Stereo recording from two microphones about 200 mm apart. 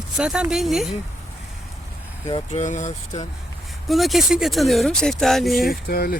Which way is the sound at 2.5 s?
40° left (ahead or behind).